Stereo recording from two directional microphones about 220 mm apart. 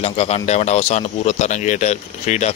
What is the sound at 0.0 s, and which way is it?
Speech, 30° left (ahead or behind).